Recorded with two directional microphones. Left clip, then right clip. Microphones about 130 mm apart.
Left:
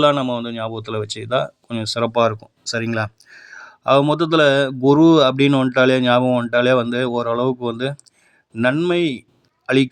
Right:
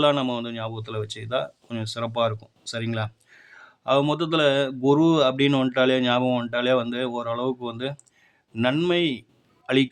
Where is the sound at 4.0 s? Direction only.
40° left (ahead or behind).